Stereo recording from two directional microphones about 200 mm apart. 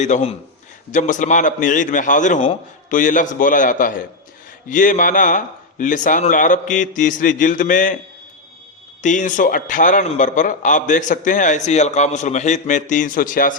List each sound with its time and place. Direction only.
0.0 s a man's voice: 35° left (ahead or behind)
9.0 s a man's voice: 40° left (ahead or behind)